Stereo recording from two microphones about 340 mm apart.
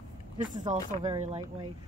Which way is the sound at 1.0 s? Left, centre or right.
Centre.